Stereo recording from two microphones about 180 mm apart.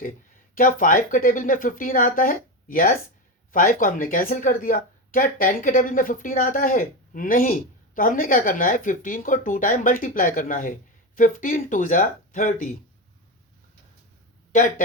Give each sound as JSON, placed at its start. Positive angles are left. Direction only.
{"t": 0.5, "sound": "speech", "side_deg": 50}
{"t": 14.5, "sound": "speech", "side_deg": 45}